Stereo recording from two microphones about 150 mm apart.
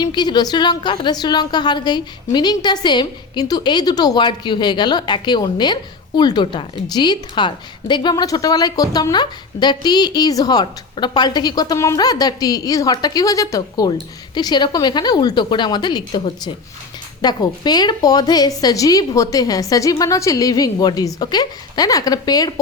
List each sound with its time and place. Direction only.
0.0 s a woman's voice: 30° left (ahead or behind)